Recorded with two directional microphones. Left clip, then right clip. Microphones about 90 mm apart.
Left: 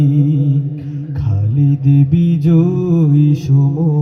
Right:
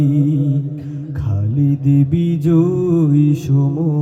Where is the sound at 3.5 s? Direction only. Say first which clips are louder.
Left 1 dB; 10° right (ahead or behind).